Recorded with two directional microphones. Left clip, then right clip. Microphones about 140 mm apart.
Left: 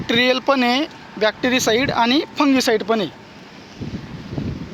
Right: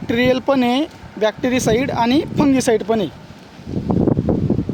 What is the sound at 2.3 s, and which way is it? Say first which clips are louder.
Speech: right 1 dB; 40° right (ahead or behind).